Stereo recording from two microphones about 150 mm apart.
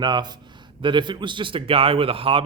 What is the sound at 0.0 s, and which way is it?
A man's voice, 30° right (ahead or behind).